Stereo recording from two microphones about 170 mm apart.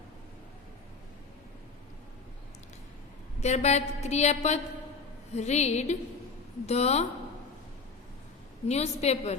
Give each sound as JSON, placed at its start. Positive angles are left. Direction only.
{"t": 3.4, "sound": "a woman's voice", "side_deg": 40}
{"t": 8.6, "sound": "a woman's voice", "side_deg": 40}